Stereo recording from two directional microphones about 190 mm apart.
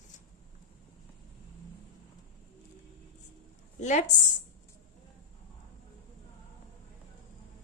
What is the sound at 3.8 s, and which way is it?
Speech, 40° left (ahead or behind).